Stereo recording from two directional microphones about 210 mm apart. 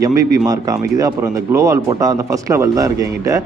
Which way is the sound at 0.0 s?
15° right (ahead or behind).